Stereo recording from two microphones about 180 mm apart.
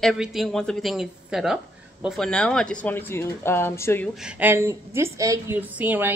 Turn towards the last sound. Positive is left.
turn(degrees=-10)  # may be behind; listen again after turning